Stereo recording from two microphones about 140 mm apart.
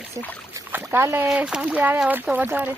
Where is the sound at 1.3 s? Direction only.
5° right (ahead or behind).